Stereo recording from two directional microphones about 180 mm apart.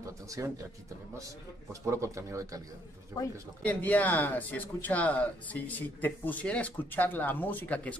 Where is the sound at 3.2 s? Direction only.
20° left (ahead or behind).